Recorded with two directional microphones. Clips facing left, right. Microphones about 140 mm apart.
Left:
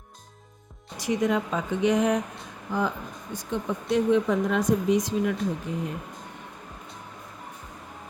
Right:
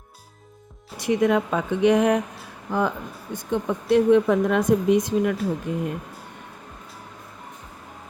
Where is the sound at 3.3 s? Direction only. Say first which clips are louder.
Right 5 dB; 55° right (ahead or behind).